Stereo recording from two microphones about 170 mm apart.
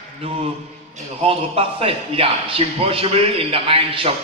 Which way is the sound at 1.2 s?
35° right (ahead or behind).